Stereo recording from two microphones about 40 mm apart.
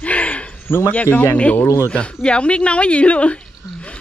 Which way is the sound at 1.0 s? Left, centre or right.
Left.